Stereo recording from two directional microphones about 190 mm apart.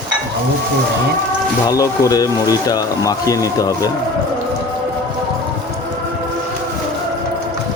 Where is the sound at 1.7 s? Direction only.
20° left (ahead or behind).